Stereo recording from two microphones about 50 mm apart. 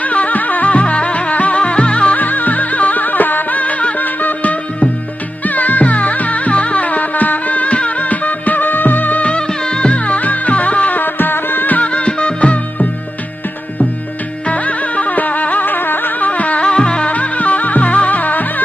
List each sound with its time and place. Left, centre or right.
0.0 s music: left
2.1 s music: left; by 9.9 s centre
9.9 s music: left
11.9 s music: left
14.4 s music: left